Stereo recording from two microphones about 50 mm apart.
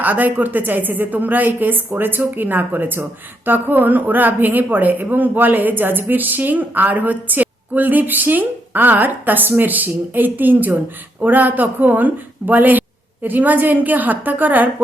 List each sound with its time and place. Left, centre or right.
0.0 s speech: right